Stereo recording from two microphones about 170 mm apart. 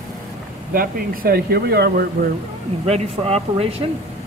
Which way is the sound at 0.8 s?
60° right (ahead or behind).